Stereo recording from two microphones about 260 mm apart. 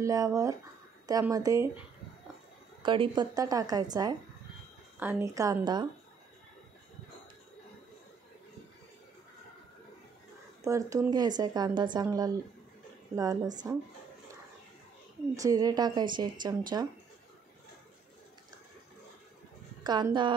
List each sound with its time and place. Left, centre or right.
0.0 s speech: centre
2.8 s speech: centre
10.6 s speech: centre
15.3 s speech: centre
19.8 s speech: centre